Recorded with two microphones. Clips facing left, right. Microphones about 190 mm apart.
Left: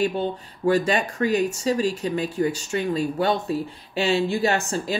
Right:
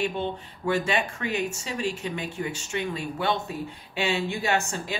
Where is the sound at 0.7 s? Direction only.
40° left (ahead or behind).